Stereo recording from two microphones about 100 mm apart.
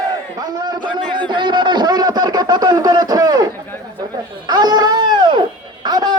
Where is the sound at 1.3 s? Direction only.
50° right (ahead or behind).